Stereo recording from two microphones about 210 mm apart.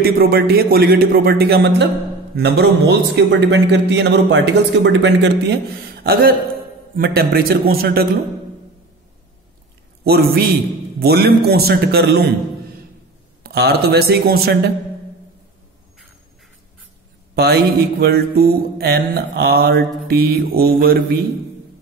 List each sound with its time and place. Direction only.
0.0 s music: 45° right (ahead or behind)
2.3 s a man's voice: 50° right (ahead or behind)
6.0 s music: 45° right (ahead or behind)
10.0 s music: 50° right (ahead or behind)
13.4 s music: 50° right (ahead or behind)
18.0 s music: 50° right (ahead or behind)